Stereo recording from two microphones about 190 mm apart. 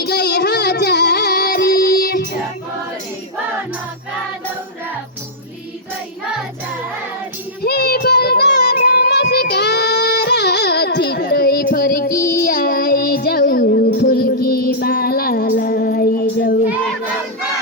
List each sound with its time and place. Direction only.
0.0 s child singing: 60° left (ahead or behind)
7.6 s child singing: 55° left (ahead or behind)